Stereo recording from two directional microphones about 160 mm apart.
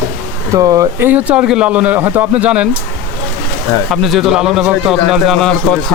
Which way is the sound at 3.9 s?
Centre (ahead or behind).